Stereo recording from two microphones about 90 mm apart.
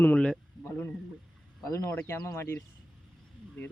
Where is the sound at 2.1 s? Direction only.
30° left (ahead or behind).